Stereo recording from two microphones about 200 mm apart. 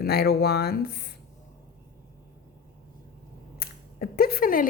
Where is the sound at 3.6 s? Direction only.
50° left (ahead or behind).